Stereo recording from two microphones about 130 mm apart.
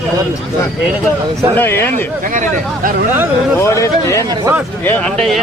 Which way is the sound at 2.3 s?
75° right (ahead or behind).